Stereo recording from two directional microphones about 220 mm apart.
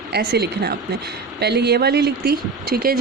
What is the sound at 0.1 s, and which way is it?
Speech, 50° right (ahead or behind).